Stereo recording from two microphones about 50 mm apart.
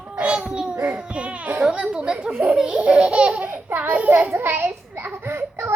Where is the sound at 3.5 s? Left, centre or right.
Right.